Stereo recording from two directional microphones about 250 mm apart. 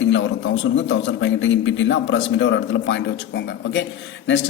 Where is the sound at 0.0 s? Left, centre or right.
Left.